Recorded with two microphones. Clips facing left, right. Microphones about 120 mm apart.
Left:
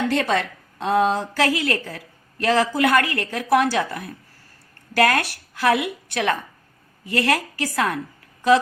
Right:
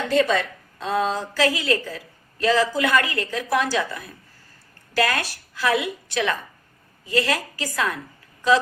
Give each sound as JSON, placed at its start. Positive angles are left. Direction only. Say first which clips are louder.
{"t": 0.1, "sound": "a woman's voice", "louder": "right 1 dB", "side_deg": 65}